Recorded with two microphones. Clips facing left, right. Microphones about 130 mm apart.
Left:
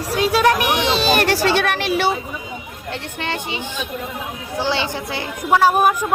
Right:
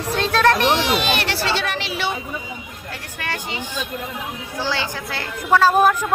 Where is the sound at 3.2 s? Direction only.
20° left (ahead or behind).